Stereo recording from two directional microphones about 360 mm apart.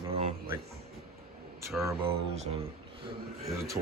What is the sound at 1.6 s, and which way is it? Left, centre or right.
Speech, centre.